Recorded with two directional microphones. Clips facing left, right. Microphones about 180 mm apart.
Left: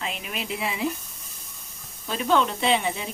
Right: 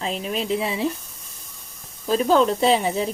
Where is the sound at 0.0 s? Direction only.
35° right (ahead or behind).